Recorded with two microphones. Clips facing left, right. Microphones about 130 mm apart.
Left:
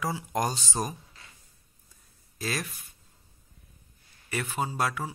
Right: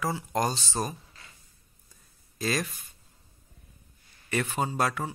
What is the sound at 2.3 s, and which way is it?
Speech, 5° left (ahead or behind).